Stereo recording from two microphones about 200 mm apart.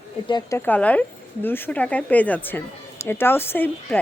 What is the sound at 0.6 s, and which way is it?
A woman's voice, 10° left (ahead or behind).